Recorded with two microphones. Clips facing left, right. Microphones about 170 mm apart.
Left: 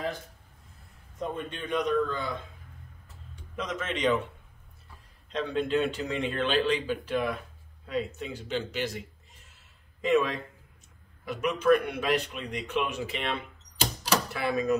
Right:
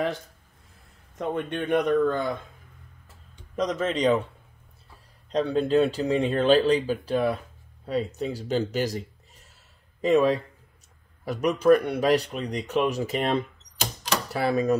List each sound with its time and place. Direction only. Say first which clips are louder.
1.1 s a man's voice: right 6 dB; 70° right (ahead or behind); by 2.3 s 50° right (ahead or behind)
3.5 s speech: right 8 dB; 35° right (ahead or behind)
5.3 s speech: right 6 dB; 35° right (ahead or behind)
10.0 s speech: right 5 dB; 35° right (ahead or behind)